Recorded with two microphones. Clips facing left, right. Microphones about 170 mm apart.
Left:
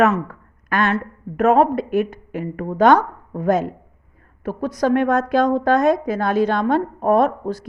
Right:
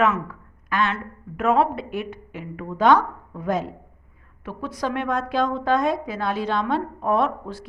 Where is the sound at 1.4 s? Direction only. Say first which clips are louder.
Left 5 dB; 45° left (ahead or behind).